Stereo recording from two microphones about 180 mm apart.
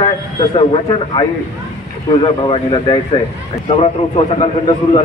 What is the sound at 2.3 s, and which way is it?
A man's voice, 30° left (ahead or behind).